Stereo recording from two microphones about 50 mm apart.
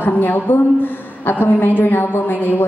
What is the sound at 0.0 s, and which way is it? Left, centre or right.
A woman's voice, left.